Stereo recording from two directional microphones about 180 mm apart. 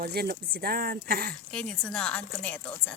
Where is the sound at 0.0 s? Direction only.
60° right (ahead or behind).